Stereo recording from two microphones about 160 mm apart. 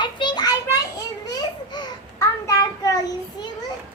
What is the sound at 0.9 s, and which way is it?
Babbling, 25° left (ahead or behind).